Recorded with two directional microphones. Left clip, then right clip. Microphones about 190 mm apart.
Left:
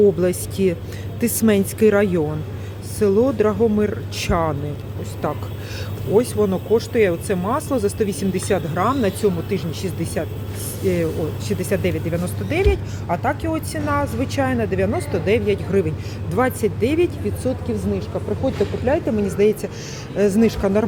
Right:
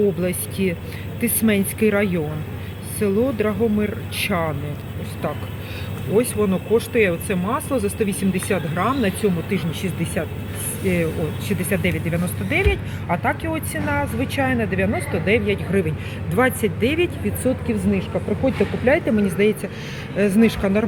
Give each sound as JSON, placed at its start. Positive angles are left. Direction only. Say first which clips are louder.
{"t": 0.2, "sound": "speech", "louder": "left 4 dB", "side_deg": 25}
{"t": 17.4, "sound": "speech", "louder": "right 3 dB", "side_deg": -5}
{"t": 19.3, "sound": "speech", "louder": "left 2 dB", "side_deg": 10}